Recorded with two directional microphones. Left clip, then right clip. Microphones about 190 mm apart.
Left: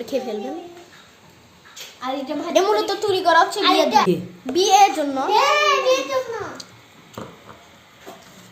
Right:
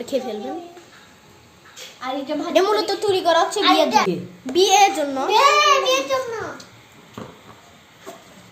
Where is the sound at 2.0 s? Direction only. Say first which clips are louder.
Right 1 dB; centre (ahead or behind).